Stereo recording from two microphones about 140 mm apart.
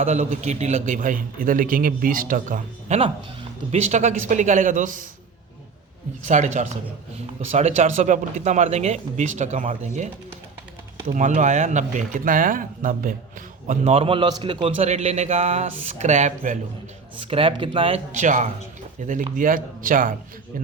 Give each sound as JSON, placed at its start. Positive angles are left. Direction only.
{"t": 0.0, "sound": "a man's voice", "side_deg": -55}
{"t": 2.9, "sound": "a man's voice", "side_deg": -50}
{"t": 6.2, "sound": "speech", "side_deg": -55}
{"t": 11.1, "sound": "a man's voice", "side_deg": -60}
{"t": 13.9, "sound": "a man's voice", "side_deg": -40}
{"t": 17.2, "sound": "speech", "side_deg": -40}
{"t": 18.1, "sound": "a man's voice", "side_deg": -60}